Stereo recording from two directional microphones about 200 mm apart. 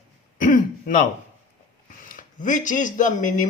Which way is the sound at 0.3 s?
45° left (ahead or behind).